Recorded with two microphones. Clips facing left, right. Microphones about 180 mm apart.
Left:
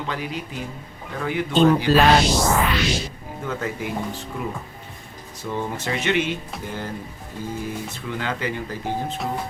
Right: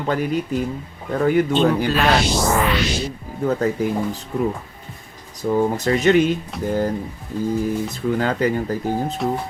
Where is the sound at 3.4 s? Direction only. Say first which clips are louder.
Right 8 dB; 40° right (ahead or behind).